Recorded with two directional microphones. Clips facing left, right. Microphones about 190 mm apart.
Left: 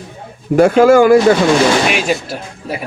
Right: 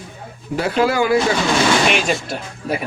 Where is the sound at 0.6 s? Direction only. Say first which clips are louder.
Left 10 dB; 50° left (ahead or behind).